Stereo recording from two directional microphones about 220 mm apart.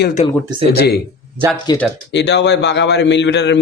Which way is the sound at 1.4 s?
15° right (ahead or behind).